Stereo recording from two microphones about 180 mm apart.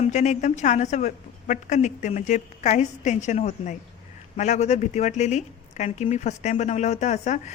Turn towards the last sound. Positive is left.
turn(degrees=40)  # may be behind; listen again after turning